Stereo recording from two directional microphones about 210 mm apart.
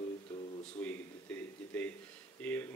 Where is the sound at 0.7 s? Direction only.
10° left (ahead or behind).